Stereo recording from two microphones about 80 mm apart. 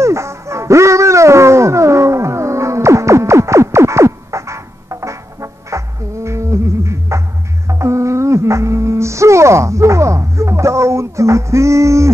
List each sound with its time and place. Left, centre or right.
0.0 s music: right